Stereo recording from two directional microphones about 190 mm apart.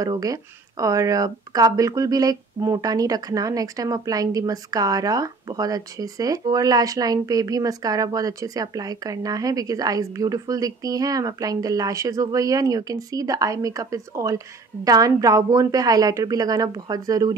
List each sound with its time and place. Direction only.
0.0 s speech: 20° right (ahead or behind)